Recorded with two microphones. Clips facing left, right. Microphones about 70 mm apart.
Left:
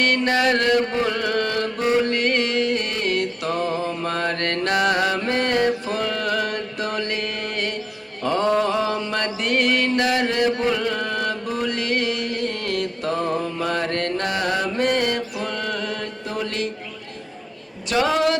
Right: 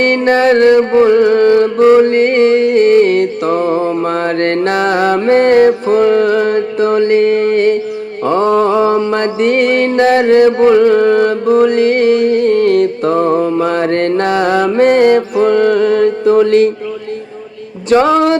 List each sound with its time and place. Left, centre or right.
0.0 s music: right
8.2 s mantra: right
9.0 s music: right
17.8 s music: right